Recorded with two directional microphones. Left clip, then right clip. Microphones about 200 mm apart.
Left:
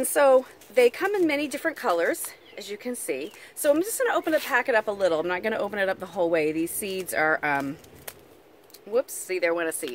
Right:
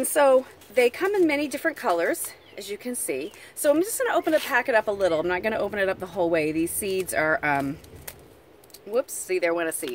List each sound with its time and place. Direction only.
0.0 s a woman's voice: 5° left (ahead or behind)